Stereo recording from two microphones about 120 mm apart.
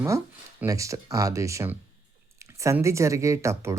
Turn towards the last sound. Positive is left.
turn(degrees=-25)  # may be behind; listen again after turning